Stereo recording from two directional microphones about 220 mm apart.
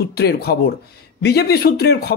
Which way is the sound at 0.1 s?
45° left (ahead or behind).